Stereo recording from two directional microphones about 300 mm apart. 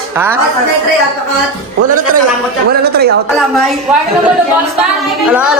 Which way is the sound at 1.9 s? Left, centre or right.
Right.